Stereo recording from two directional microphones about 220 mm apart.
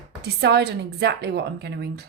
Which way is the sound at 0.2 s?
50° right (ahead or behind).